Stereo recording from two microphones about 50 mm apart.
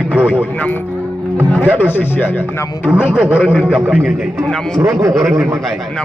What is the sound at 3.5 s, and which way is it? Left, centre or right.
Speech, centre.